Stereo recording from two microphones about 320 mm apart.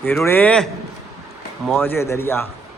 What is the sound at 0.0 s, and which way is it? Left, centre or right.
Speech, centre.